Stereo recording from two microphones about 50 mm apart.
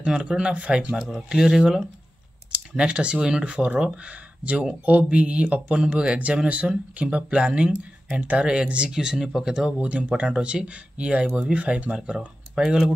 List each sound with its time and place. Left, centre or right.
0.0 s speech: centre
1.1 s speech: centre
2.8 s speech: right
8.1 s speech: right; by 9.8 s centre
9.8 s speech: right